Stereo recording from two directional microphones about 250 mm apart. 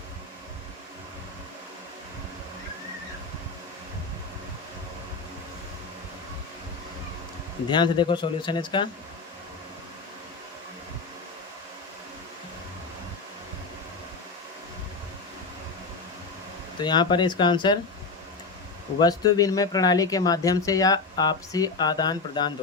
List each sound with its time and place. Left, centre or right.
7.7 s speech: centre
16.8 s speech: centre
18.9 s speech: centre